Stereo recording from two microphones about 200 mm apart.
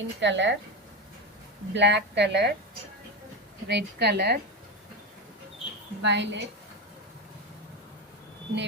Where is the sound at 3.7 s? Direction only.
55° right (ahead or behind).